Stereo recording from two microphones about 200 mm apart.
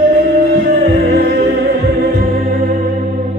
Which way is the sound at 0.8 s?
50° right (ahead or behind).